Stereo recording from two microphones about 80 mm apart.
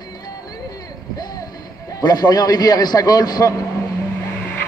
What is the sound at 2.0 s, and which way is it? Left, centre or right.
A man's voice, left.